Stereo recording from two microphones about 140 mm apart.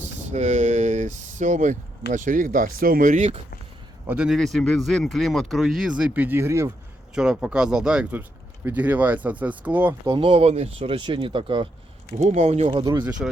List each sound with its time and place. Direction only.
0.2 s a sound: 55° right (ahead or behind)
2.1 s speech: 70° right (ahead or behind)
4.0 s speech: 10° right (ahead or behind)
4.3 s speech: centre (ahead or behind); by 6.7 s 20° right (ahead or behind)
7.1 s speech: 5° right (ahead or behind)
10.1 s speech: 40° right (ahead or behind)
12.2 s speech: 55° right (ahead or behind)
12.8 s speech: 30° right (ahead or behind)
13.1 s speech: 5° right (ahead or behind)